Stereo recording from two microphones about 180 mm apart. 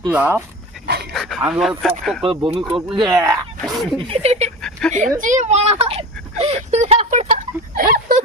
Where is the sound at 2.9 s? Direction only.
20° right (ahead or behind).